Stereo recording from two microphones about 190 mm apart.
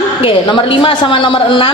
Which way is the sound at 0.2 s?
25° left (ahead or behind).